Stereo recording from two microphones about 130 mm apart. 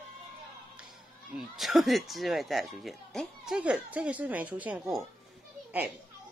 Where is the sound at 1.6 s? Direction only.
Centre (ahead or behind).